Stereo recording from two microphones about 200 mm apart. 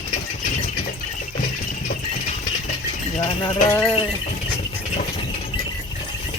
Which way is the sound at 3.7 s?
10° left (ahead or behind).